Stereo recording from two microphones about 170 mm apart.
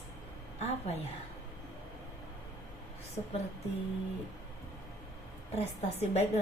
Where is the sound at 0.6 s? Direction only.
40° left (ahead or behind).